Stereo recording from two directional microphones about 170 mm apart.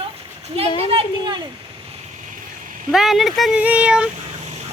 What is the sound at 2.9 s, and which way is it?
Speech, centre (ahead or behind).